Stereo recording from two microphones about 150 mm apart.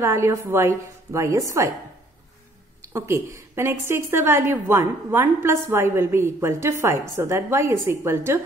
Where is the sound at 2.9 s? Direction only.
20° right (ahead or behind).